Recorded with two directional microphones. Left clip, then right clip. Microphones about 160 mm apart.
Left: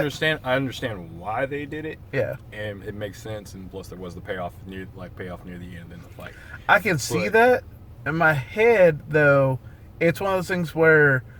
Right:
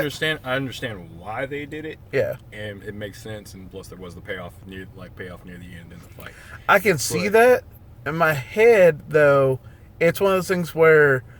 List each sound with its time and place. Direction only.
0.1 s speech: 5° right (ahead or behind)
2.0 s speech: 35° right (ahead or behind)
2.5 s speech: 5° right (ahead or behind)
6.7 s speech: 35° right (ahead or behind)